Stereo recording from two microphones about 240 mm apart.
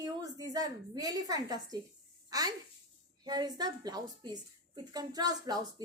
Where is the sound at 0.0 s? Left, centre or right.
Centre.